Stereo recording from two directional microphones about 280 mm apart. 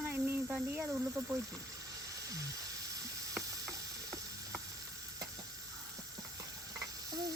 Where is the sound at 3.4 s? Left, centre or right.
Centre.